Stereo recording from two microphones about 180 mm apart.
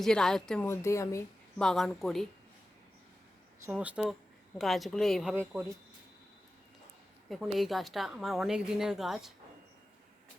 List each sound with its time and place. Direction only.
0.0 s a woman's voice: 5° left (ahead or behind)
1.5 s a woman's voice: centre (ahead or behind)
3.7 s a woman's voice: 5° right (ahead or behind)
5.3 s speech: 10° right (ahead or behind)
7.3 s a woman's voice: centre (ahead or behind)